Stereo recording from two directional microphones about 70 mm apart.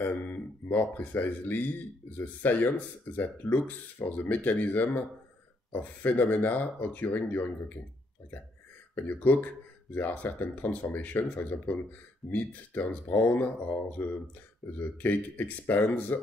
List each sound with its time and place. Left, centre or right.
0.0 s speech: left
8.9 s speech: left